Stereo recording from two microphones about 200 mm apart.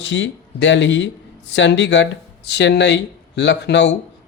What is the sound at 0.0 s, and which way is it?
Speech, 65° left (ahead or behind).